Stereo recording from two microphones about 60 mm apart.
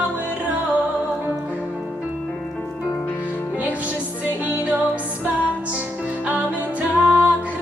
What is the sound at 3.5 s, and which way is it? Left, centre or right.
Music, right.